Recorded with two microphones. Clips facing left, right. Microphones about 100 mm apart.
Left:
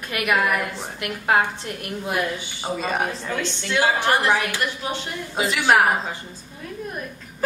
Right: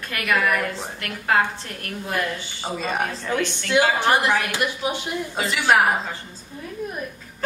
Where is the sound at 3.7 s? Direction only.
15° right (ahead or behind).